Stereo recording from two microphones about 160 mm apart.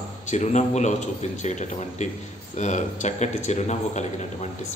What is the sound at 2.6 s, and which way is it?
A man's voice, 50° left (ahead or behind).